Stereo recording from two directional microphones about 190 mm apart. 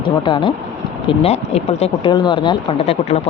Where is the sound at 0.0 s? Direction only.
25° left (ahead or behind).